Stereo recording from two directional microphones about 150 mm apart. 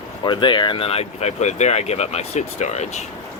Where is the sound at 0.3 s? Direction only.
30° left (ahead or behind); by 3.0 s 50° left (ahead or behind).